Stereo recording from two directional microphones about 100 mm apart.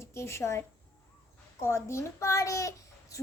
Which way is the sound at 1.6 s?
25° left (ahead or behind).